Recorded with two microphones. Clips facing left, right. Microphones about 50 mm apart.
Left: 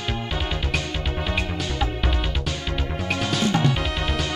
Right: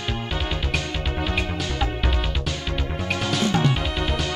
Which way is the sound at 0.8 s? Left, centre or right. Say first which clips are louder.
Right 1 dB; right.